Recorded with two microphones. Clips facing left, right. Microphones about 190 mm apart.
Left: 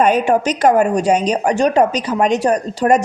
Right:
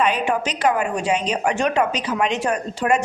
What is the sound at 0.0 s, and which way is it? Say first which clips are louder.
A woman's voice: left 7 dB; 45° left (ahead or behind).